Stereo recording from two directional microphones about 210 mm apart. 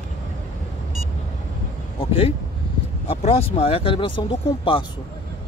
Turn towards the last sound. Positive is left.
turn(degrees=25)  # may be behind; listen again after turning